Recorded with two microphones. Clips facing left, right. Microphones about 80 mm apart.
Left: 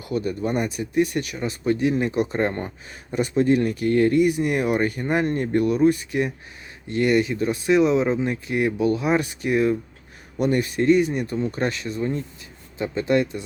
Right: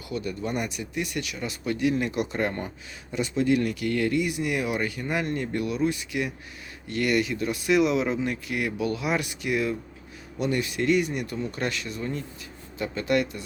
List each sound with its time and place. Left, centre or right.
0.1 s speech: left
3.1 s speech: left